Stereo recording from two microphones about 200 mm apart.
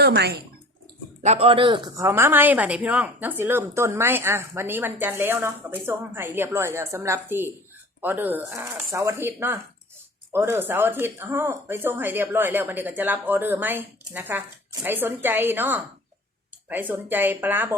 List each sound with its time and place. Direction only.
0.0 s speech: 55° right (ahead or behind)
1.2 s speech: 30° right (ahead or behind); by 17.7 s 10° right (ahead or behind)